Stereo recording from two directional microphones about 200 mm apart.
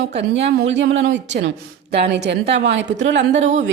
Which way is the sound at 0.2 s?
60° right (ahead or behind).